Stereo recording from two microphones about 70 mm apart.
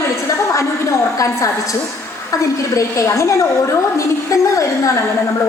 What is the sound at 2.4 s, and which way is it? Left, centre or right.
A woman's voice, left.